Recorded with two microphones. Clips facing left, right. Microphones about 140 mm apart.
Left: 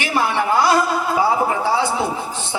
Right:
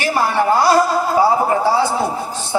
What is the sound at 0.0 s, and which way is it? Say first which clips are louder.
A man's voice: right 3 dB; 40° right (ahead or behind).